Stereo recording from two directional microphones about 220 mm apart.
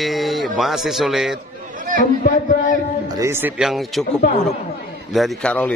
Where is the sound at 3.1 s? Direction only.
10° right (ahead or behind).